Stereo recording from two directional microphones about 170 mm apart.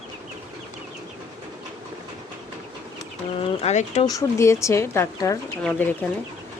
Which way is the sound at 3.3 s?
40° left (ahead or behind).